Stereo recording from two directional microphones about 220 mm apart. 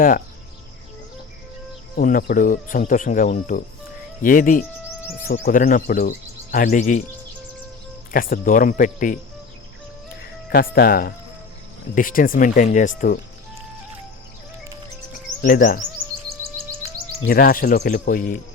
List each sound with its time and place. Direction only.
2.0 s speech: 40° left (ahead or behind)
8.1 s speech: 40° left (ahead or behind)
10.5 s speech: 45° left (ahead or behind)
15.4 s speech: 40° left (ahead or behind)
17.2 s speech: 40° left (ahead or behind)